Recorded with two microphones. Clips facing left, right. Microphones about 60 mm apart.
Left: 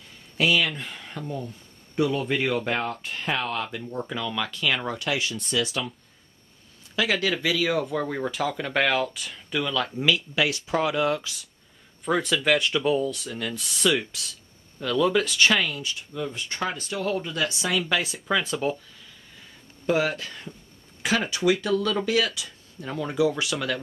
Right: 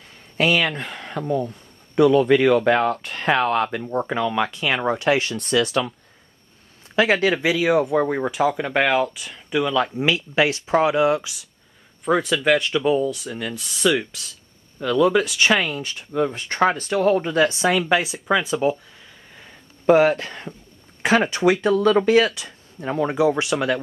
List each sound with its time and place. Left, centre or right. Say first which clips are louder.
0.4 s speech: right 3 dB; right
2.0 s speech: right 10 dB; right
2.9 s speech: right 8 dB; right
5.2 s speech: right 6 dB; right
7.0 s speech: right 7 dB; right; by 9.8 s centre
9.9 s speech: right 4 dB; right
12.0 s speech: right 4 dB; centre; by 15.8 s right
15.8 s speech: right 8 dB; right
18.0 s speech: right 5 dB; centre
19.9 s speech: right 9 dB; right